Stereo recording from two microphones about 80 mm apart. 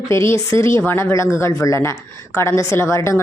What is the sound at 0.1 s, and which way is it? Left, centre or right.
A woman's voice, left.